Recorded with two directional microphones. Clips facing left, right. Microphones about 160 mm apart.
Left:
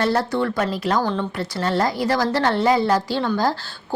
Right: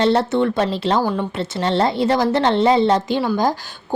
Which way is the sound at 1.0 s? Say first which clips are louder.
Right 2 dB; 10° right (ahead or behind).